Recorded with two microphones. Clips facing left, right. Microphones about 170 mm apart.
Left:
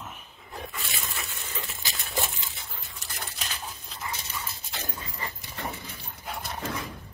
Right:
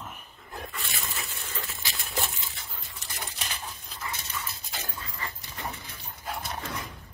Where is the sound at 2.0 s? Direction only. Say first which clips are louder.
Left 2 dB; centre (ahead or behind).